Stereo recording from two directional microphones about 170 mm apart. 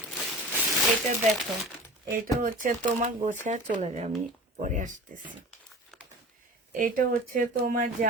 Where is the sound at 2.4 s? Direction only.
50° right (ahead or behind).